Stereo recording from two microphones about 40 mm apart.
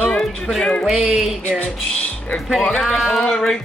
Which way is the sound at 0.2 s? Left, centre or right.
Centre.